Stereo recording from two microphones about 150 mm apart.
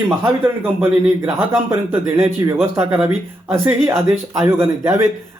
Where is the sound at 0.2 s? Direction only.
15° right (ahead or behind).